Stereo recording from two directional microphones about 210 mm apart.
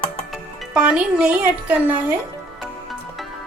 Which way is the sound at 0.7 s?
5° right (ahead or behind).